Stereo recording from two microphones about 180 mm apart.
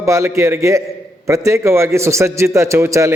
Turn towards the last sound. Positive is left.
turn(degrees=-15)  # may be behind; listen again after turning